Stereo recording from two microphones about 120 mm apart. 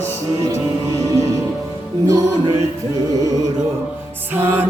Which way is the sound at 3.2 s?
30° right (ahead or behind).